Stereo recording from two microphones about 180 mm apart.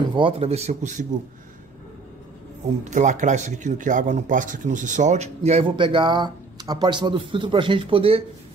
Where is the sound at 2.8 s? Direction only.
40° right (ahead or behind).